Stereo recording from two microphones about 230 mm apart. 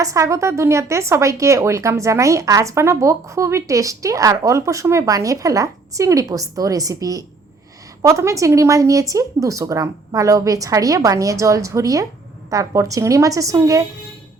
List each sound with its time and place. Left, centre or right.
0.0 s a woman's voice: centre